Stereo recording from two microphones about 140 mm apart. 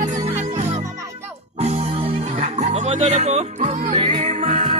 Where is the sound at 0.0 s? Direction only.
60° right (ahead or behind).